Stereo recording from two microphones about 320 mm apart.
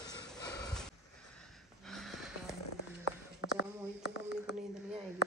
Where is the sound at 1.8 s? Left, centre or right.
Centre.